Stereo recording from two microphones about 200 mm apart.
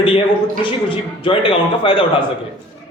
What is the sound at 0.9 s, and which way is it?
A man's voice, 25° left (ahead or behind).